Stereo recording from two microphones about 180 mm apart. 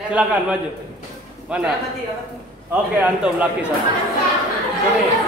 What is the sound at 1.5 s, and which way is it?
Speech, 5° right (ahead or behind).